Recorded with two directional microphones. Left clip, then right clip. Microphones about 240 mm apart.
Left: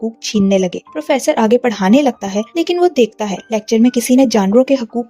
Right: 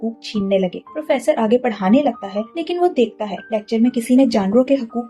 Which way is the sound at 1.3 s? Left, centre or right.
Left.